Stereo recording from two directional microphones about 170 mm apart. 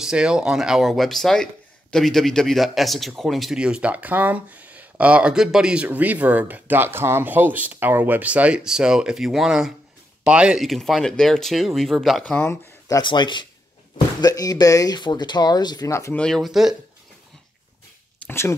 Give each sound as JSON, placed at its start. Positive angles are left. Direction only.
{"t": 0.0, "sound": "speech", "side_deg": -5}
{"t": 16.2, "sound": "speech", "side_deg": 5}
{"t": 18.2, "sound": "a sound", "side_deg": 15}